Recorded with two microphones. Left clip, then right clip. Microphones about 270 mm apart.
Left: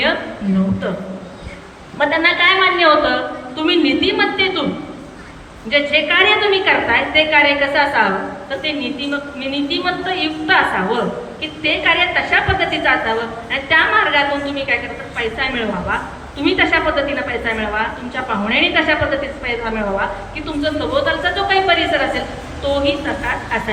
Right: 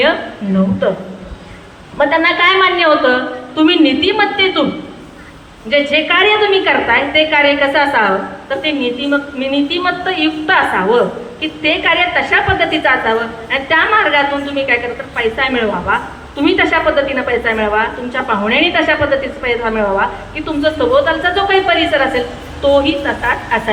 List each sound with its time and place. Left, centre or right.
0.8 s a woman's voice: centre
5.7 s a woman's voice: centre